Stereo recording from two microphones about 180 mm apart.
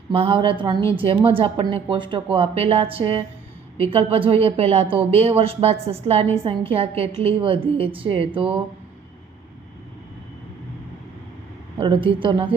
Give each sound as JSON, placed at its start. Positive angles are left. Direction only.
{"t": 0.1, "sound": "a woman's voice", "side_deg": -30}
{"t": 11.8, "sound": "speech", "side_deg": -30}